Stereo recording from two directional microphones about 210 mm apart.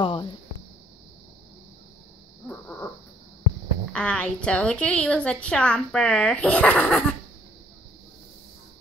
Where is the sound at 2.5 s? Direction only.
5° left (ahead or behind).